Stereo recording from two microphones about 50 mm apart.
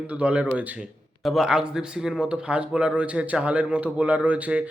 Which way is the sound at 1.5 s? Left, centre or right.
Centre.